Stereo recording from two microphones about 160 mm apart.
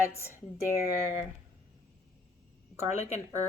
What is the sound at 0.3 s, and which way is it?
Speech, 15° right (ahead or behind).